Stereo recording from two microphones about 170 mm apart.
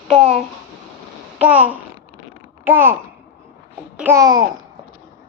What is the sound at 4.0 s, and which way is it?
Babbling, 15° right (ahead or behind).